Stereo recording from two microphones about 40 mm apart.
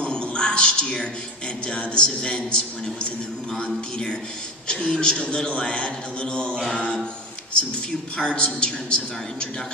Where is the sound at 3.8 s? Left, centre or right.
Left.